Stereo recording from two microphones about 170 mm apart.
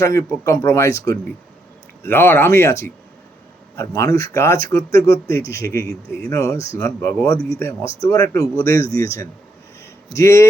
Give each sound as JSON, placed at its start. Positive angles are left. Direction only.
{"t": 0.0, "sound": "speech", "side_deg": 15}
{"t": 6.3, "sound": "speech", "side_deg": 20}